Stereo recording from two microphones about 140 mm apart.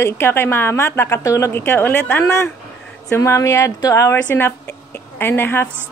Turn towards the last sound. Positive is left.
turn(degrees=15)  # may be behind; listen again after turning